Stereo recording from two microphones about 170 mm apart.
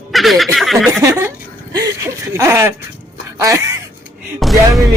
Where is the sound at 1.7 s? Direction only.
20° right (ahead or behind).